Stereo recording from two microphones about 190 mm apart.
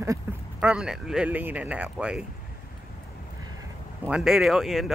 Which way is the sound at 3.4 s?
20° right (ahead or behind).